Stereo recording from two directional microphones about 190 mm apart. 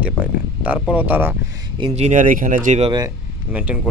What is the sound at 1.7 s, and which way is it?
Speech, 30° right (ahead or behind).